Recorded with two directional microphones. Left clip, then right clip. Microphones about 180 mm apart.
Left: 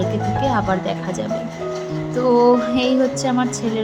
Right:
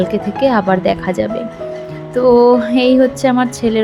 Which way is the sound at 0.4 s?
25° right (ahead or behind).